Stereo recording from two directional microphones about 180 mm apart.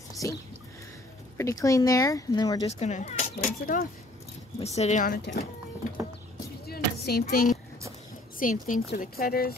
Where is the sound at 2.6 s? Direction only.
35° left (ahead or behind).